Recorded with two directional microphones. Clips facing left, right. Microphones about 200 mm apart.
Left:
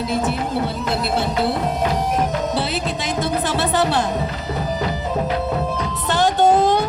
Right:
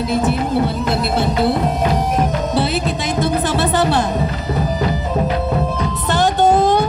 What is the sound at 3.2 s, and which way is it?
Music, 50° right (ahead or behind).